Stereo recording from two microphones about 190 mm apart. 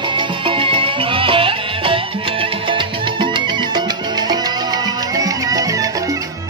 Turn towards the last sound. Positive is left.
turn(degrees=-20)  # may be behind; listen again after turning